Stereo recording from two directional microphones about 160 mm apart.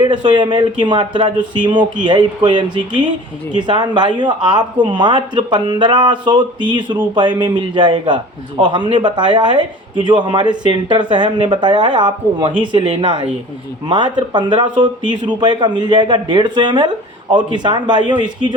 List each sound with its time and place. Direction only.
0.0 s a man's voice: 30° right (ahead or behind)